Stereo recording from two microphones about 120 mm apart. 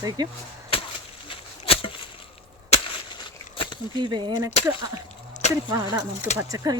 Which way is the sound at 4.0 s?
40° right (ahead or behind).